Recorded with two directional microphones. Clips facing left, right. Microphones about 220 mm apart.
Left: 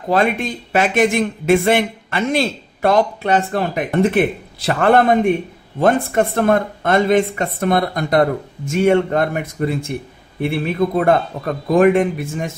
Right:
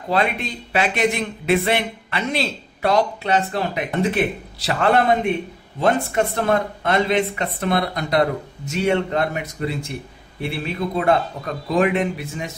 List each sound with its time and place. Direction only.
0.1 s speech: 50° left (ahead or behind)